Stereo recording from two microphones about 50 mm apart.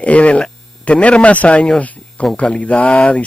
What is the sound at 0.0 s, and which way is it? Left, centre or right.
Speech, left.